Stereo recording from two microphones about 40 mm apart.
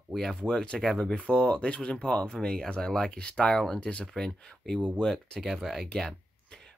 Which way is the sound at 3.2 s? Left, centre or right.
Left.